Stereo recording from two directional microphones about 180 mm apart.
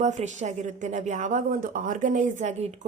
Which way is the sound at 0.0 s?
40° right (ahead or behind).